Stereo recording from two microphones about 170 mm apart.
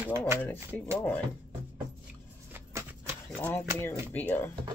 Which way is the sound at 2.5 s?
15° right (ahead or behind).